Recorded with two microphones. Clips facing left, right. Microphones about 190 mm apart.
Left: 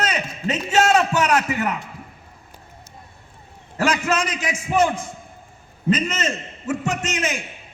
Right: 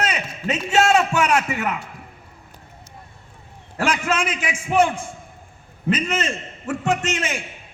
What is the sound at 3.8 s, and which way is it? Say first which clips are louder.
A man's voice: left 1 dB; 40° left (ahead or behind).